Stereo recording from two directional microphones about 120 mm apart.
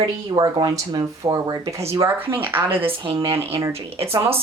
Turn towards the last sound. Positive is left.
turn(degrees=-55)  # may be behind; listen again after turning